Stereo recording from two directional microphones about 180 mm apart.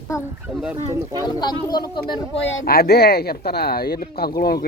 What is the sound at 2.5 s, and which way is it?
Speech, 60° left (ahead or behind).